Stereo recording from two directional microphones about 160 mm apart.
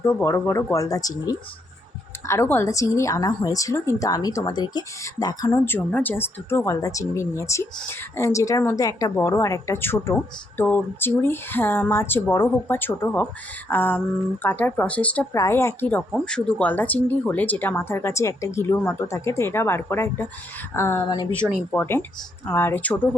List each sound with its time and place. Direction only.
0.0 s speech: 15° left (ahead or behind)
2.2 s a woman's voice: 15° left (ahead or behind)
5.6 s speech: 10° left (ahead or behind)